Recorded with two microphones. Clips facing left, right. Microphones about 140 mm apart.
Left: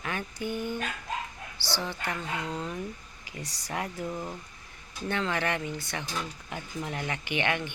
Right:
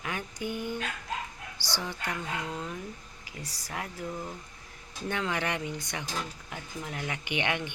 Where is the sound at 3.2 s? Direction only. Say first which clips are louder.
Left 3 dB; centre (ahead or behind).